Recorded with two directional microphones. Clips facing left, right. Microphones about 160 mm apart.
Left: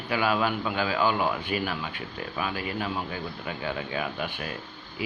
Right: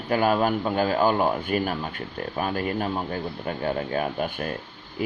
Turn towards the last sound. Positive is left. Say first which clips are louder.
# right 5 dB
turn(degrees=-50)  # may be behind; listen again after turning